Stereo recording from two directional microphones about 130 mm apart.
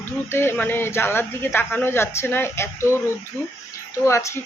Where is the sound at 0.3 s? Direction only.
15° left (ahead or behind).